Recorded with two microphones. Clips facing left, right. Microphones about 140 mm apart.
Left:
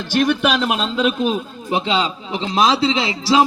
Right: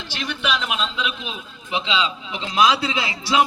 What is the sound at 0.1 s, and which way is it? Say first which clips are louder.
A man's voice: left 9 dB; 50° left (ahead or behind).